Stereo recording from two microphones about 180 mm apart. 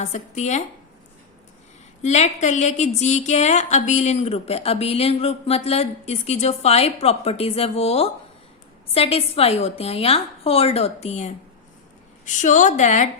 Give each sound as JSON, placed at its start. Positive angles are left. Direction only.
{"t": 0.0, "sound": "speech", "side_deg": 40}
{"t": 2.0, "sound": "speech", "side_deg": 40}